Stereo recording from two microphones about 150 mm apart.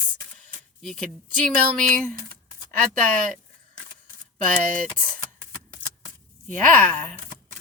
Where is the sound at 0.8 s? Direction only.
5° left (ahead or behind).